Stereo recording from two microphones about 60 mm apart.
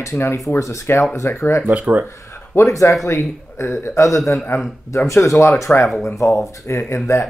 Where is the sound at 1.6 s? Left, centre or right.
Right.